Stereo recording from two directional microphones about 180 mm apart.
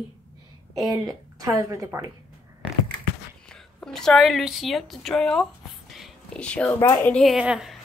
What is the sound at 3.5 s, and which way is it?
A woman's voice, 5° left (ahead or behind).